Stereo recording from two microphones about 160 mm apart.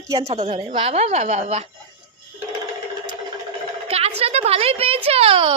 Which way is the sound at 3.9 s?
40° right (ahead or behind).